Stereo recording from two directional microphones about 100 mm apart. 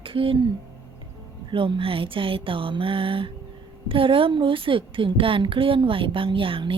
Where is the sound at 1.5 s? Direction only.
55° right (ahead or behind).